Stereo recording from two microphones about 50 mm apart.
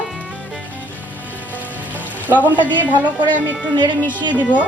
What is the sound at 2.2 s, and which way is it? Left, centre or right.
Speech, right.